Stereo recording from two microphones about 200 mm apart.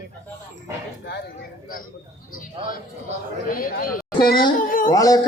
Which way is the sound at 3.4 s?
45° left (ahead or behind).